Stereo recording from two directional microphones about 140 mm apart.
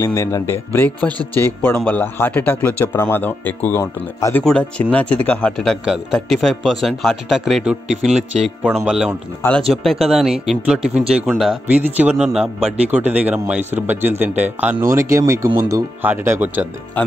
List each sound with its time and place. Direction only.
0.0 s speech: 20° left (ahead or behind)
4.5 s speech: 5° left (ahead or behind); by 16.6 s 10° right (ahead or behind)